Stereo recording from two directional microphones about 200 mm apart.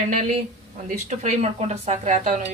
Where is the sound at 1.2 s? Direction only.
35° right (ahead or behind).